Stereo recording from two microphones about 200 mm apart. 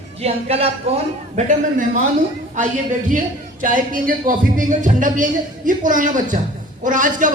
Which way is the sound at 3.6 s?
45° right (ahead or behind).